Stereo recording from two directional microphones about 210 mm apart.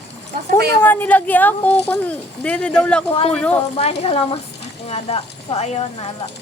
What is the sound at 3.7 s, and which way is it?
A woman's voice, 30° left (ahead or behind).